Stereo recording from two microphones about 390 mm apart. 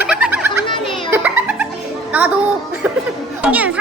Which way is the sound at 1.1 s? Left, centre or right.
Centre.